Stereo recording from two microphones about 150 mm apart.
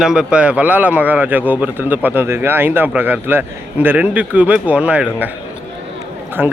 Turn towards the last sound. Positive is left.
turn(degrees=-15)  # may be behind; listen again after turning